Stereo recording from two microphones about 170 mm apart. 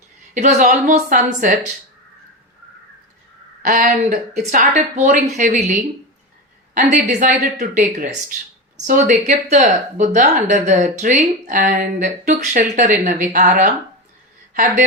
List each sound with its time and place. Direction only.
0.3 s speech: 50° right (ahead or behind)
3.6 s speech: 50° right (ahead or behind)
7.1 s speech: 45° right (ahead or behind)